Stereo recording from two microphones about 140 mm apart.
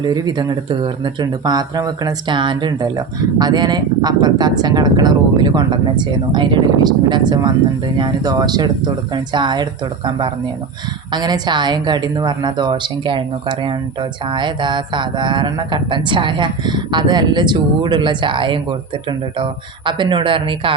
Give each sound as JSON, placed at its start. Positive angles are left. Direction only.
{"t": 0.0, "sound": "speech", "side_deg": -30}